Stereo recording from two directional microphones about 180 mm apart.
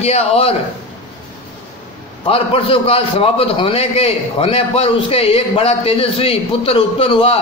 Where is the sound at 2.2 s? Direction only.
30° left (ahead or behind).